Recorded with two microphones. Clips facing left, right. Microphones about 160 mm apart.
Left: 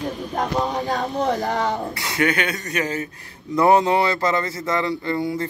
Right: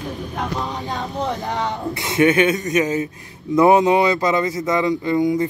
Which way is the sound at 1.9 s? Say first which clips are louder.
Right 11 dB; 20° right (ahead or behind).